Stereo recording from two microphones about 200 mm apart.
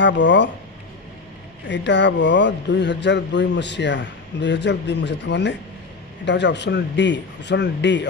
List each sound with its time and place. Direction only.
0.0 s speech: 60° left (ahead or behind)
1.7 s speech: 60° left (ahead or behind)